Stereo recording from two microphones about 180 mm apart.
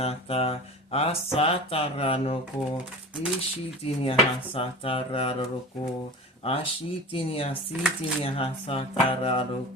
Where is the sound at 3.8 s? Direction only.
30° left (ahead or behind).